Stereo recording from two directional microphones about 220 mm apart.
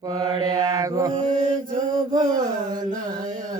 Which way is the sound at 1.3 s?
35° right (ahead or behind).